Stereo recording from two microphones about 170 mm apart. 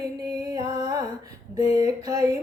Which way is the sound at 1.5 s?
20° right (ahead or behind).